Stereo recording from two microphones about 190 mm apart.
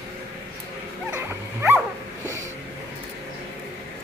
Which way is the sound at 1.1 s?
10° right (ahead or behind).